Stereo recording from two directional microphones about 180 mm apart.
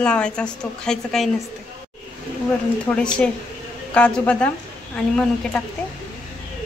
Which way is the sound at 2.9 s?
5° left (ahead or behind).